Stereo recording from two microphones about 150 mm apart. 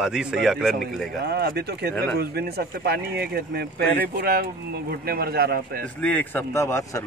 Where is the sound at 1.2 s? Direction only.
90° right.